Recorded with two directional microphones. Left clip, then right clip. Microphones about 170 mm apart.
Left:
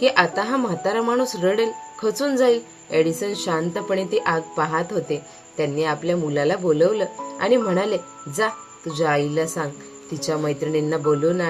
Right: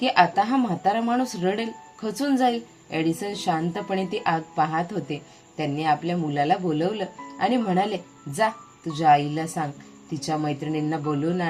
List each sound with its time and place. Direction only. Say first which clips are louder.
0.0 s a woman's voice: left 1 dB; 15° left (ahead or behind)